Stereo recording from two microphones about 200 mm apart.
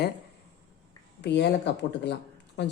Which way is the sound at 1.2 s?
60° left (ahead or behind).